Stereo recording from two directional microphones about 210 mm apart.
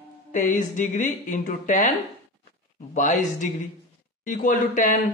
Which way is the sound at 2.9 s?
35° left (ahead or behind).